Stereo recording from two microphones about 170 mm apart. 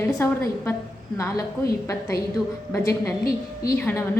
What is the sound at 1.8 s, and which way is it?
A woman's voice, 15° left (ahead or behind).